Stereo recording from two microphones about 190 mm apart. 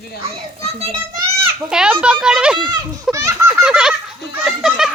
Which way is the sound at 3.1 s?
15° right (ahead or behind).